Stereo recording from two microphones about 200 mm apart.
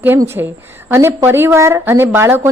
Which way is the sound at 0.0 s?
10° right (ahead or behind).